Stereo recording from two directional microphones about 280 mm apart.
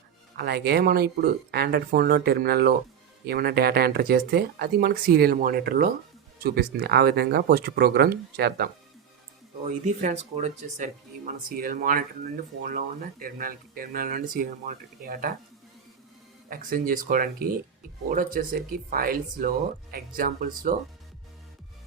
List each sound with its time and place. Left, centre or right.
0.3 s speech: right
16.5 s speech: right